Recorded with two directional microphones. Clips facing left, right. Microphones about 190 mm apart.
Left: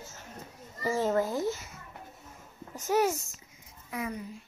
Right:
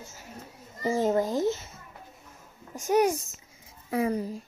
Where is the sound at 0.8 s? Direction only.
15° right (ahead or behind).